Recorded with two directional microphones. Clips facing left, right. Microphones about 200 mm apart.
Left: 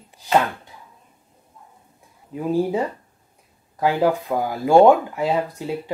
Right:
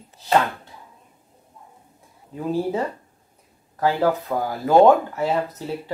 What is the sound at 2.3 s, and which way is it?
A woman's voice, 15° left (ahead or behind).